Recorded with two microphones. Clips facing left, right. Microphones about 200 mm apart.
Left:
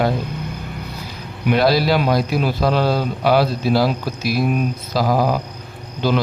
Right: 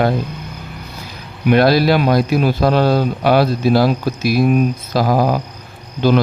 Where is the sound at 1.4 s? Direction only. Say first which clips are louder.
Right 4 dB; 55° right (ahead or behind).